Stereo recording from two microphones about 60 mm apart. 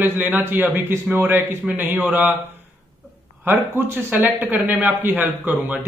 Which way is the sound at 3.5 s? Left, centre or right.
Right.